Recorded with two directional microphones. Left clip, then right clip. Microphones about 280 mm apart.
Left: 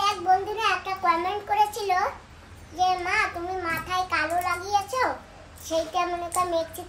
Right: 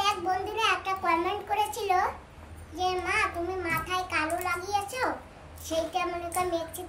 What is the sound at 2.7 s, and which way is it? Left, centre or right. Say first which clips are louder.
Babbling: left 5 dB; centre.